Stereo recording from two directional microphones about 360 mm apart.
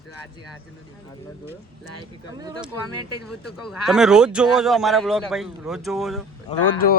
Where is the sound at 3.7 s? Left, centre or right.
Centre.